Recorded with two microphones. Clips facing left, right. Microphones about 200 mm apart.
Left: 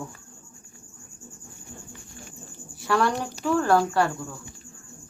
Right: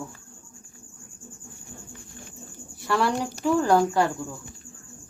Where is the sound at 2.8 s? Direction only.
5° right (ahead or behind).